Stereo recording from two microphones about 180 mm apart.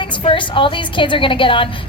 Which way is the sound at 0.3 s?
30° left (ahead or behind).